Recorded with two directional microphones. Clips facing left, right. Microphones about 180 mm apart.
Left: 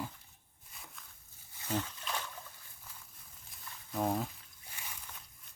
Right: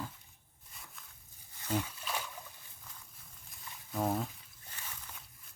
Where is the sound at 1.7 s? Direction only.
10° right (ahead or behind).